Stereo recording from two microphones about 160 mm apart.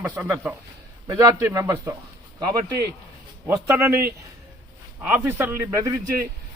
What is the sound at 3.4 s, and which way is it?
Speech, 15° right (ahead or behind).